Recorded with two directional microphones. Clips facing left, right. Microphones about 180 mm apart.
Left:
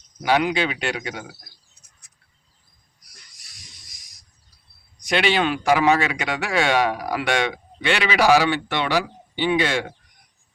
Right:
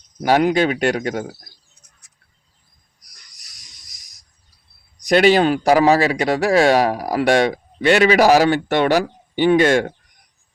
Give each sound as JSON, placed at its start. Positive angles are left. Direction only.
{"t": 0.2, "sound": "speech", "side_deg": -45}
{"t": 3.0, "sound": "a sound", "side_deg": -40}
{"t": 4.9, "sound": "speech", "side_deg": -40}